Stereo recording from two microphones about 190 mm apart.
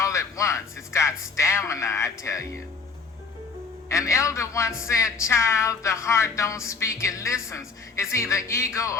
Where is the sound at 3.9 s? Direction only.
15° left (ahead or behind).